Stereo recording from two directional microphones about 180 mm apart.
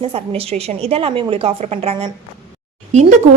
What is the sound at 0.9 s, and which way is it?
A woman's voice, 30° right (ahead or behind).